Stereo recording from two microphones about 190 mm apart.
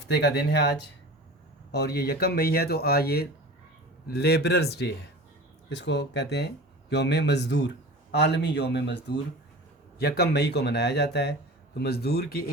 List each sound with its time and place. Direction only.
0.1 s speech: 60° left (ahead or behind)
1.7 s speech: 60° left (ahead or behind)